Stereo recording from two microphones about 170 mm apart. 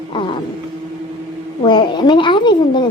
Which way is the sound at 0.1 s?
30° left (ahead or behind).